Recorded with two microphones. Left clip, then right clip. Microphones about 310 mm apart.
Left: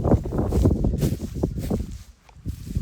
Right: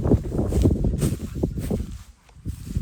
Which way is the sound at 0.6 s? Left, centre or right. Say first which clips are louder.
Right 1 dB; centre.